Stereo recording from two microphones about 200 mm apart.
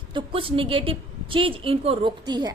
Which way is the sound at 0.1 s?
25° right (ahead or behind).